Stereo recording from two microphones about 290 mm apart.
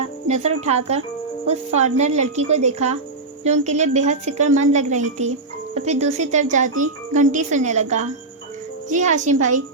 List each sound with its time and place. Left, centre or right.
0.0 s a woman's voice: right